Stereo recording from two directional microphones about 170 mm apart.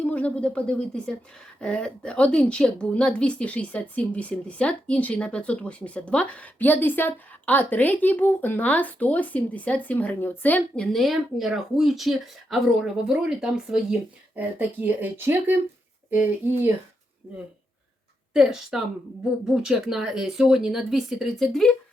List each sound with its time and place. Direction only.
0.0 s a woman's voice: 10° left (ahead or behind); by 17.4 s 20° right (ahead or behind)
18.3 s speech: 5° right (ahead or behind)